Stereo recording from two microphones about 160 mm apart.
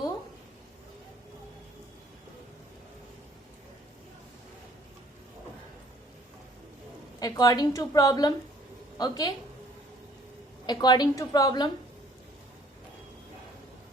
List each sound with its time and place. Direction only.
7.2 s a woman's voice: 25° left (ahead or behind)
10.7 s a woman's voice: 25° left (ahead or behind)